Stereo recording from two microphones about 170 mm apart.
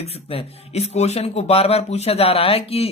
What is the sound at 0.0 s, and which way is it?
Speech, 35° left (ahead or behind).